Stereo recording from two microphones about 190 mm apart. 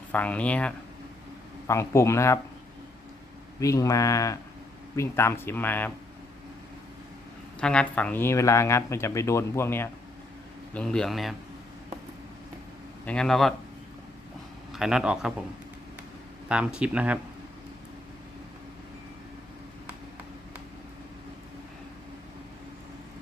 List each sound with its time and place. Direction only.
0.1 s speech: 5° left (ahead or behind)
3.6 s speech: 15° left (ahead or behind)
7.6 s speech: 5° left (ahead or behind)
13.1 s speech: 5° left (ahead or behind)
14.7 s speech: 5° right (ahead or behind)
16.5 s speech: 5° right (ahead or behind)